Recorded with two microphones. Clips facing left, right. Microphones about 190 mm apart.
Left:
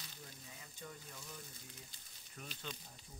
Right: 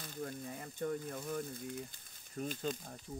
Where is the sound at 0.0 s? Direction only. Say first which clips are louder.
Right 14 dB; 50° right (ahead or behind).